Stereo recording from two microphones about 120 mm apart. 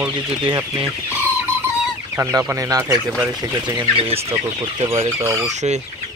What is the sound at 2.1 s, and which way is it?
Speech, 20° right (ahead or behind).